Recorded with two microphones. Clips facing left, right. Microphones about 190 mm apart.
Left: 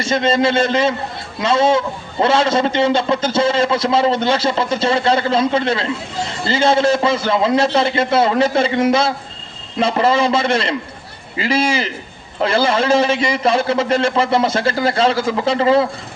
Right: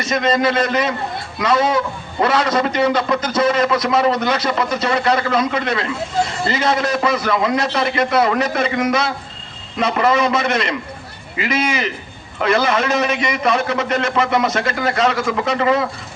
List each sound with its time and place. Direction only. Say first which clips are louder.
0.0 s a man's voice: left 1 dB; 30° left (ahead or behind)